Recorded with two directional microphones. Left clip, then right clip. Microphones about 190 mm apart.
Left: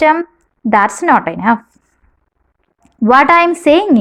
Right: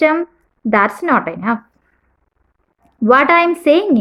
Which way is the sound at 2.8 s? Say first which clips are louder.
Left 2 dB; 35° left (ahead or behind).